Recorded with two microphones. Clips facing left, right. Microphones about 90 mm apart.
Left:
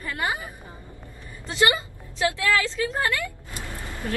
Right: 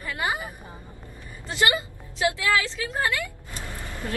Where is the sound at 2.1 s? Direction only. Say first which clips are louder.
Left 1 dB; 15° right (ahead or behind).